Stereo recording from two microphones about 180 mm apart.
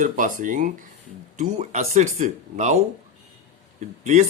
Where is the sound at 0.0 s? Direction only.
50° right (ahead or behind).